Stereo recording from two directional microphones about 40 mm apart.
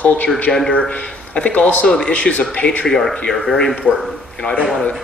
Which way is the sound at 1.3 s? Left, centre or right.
Left.